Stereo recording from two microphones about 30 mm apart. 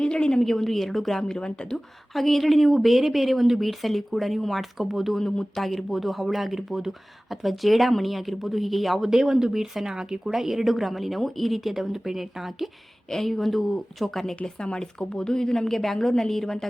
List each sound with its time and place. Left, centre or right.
0.0 s a woman's voice: left
0.4 s a woman's voice: centre
1.4 s speech: left
2.1 s speech: centre
9.0 s speech: centre
13.1 s speech: centre
14.4 s speech: left
15.7 s a woman's voice: centre